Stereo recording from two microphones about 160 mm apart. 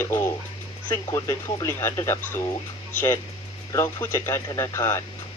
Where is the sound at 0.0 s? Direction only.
15° left (ahead or behind).